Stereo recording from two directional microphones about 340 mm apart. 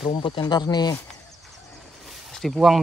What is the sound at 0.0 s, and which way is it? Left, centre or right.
Speech, centre.